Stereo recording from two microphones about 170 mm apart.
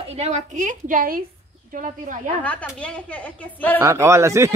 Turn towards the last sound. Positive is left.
turn(degrees=-15)  # may be behind; listen again after turning